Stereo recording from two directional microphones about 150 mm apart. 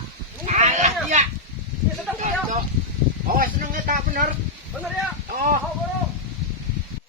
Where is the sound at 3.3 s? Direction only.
70° right (ahead or behind).